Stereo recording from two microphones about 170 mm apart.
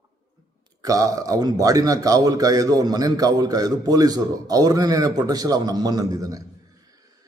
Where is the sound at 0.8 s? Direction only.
20° right (ahead or behind).